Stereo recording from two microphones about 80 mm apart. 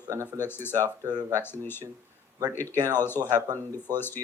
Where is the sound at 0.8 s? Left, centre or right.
Right.